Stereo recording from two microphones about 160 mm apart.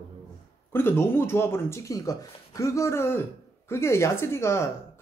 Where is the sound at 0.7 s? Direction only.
15° left (ahead or behind).